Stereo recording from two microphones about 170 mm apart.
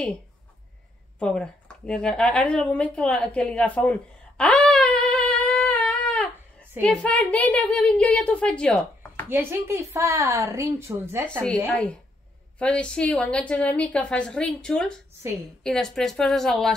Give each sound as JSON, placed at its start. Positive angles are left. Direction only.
{"t": 1.2, "sound": "a woman's voice", "side_deg": 5}
{"t": 9.3, "sound": "a woman's voice", "side_deg": -15}
{"t": 11.4, "sound": "a woman's voice", "side_deg": 5}